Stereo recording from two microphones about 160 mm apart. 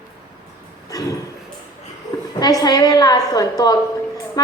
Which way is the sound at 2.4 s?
25° left (ahead or behind).